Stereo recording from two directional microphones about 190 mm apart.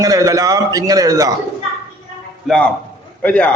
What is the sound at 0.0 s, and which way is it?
A man's voice, 20° right (ahead or behind).